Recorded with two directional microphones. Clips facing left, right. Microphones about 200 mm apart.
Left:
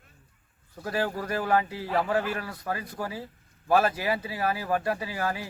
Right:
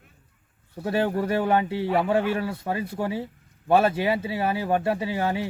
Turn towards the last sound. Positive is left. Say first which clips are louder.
# right 5 dB
turn(degrees=-25)  # may be behind; listen again after turning